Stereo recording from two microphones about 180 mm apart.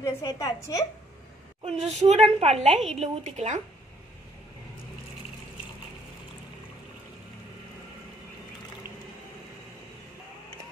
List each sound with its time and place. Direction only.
0.0 s a woman's voice: 20° left (ahead or behind)
1.6 s a woman's voice: 35° right (ahead or behind)